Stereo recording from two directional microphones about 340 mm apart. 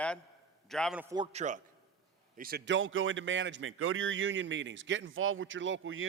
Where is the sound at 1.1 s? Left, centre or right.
Centre.